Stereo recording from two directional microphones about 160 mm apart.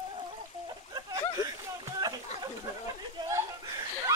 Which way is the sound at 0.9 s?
25° right (ahead or behind).